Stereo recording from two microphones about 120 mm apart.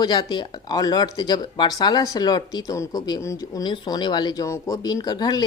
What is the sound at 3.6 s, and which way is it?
Speech, 35° left (ahead or behind).